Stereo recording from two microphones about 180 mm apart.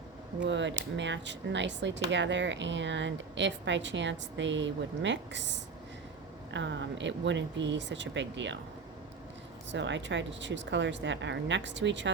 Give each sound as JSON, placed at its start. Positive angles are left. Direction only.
{"t": 0.4, "sound": "speech", "side_deg": -90}
{"t": 9.7, "sound": "speech", "side_deg": -80}